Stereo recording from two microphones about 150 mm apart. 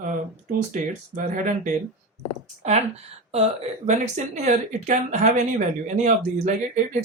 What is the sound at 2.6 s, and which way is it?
Speech, 45° right (ahead or behind).